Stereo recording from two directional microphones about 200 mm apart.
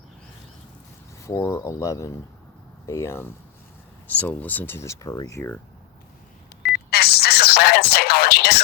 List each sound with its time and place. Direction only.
1.2 s speech: 15° left (ahead or behind)
6.6 s music: 50° left (ahead or behind)